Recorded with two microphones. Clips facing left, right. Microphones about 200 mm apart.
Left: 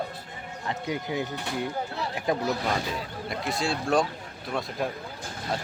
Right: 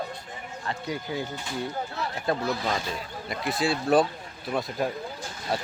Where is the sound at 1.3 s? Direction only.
65° left (ahead or behind).